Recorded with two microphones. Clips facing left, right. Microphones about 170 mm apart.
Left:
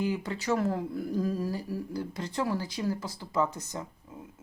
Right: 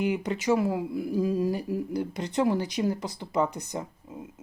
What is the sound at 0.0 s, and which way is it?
Speech, 20° right (ahead or behind).